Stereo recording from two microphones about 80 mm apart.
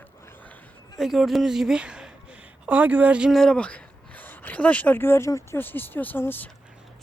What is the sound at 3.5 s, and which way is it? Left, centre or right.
Speech, centre.